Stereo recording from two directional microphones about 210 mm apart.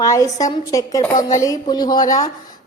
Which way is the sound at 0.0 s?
15° left (ahead or behind).